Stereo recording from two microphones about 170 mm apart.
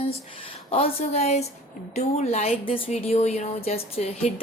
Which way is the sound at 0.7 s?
35° left (ahead or behind).